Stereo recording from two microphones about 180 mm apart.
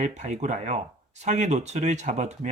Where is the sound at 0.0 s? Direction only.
40° right (ahead or behind).